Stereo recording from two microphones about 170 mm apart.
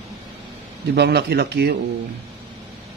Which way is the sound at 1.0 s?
75° right (ahead or behind).